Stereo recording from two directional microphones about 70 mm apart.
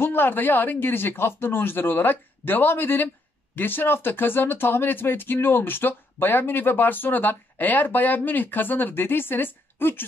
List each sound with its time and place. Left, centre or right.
0.0 s speech: left